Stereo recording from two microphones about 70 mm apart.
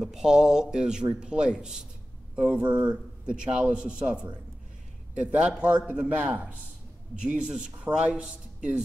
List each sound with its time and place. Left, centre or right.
0.0 s a man's voice: centre